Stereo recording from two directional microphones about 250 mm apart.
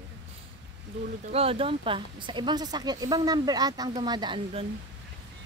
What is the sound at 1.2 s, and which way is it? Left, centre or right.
Speech, right.